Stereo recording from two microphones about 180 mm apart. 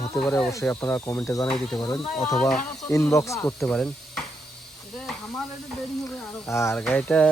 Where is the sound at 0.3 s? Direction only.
15° left (ahead or behind).